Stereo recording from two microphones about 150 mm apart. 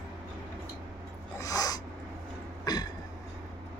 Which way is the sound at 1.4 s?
25° left (ahead or behind).